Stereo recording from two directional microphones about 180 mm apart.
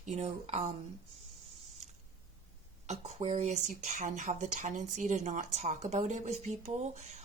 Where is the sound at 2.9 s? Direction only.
40° right (ahead or behind).